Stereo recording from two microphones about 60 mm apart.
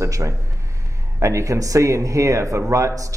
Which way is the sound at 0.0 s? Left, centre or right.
Right.